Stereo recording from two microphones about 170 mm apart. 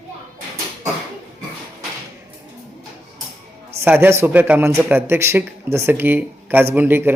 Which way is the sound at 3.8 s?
15° right (ahead or behind).